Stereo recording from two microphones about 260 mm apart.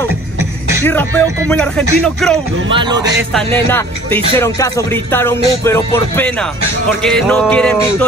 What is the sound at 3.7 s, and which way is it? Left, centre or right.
Music, centre.